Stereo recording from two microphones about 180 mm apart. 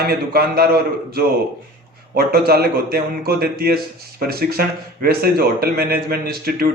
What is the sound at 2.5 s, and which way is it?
A man's voice, 55° right (ahead or behind).